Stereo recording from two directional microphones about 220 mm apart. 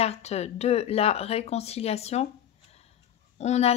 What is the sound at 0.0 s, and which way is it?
A woman's voice, 30° left (ahead or behind).